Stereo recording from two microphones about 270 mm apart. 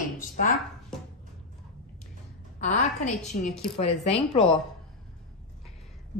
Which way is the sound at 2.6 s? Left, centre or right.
Left.